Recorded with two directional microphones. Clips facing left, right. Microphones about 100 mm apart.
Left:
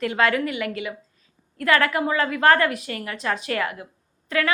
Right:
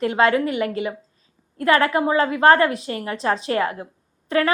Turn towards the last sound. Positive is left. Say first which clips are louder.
# right 4 dB
turn(degrees=-35)  # may be behind; listen again after turning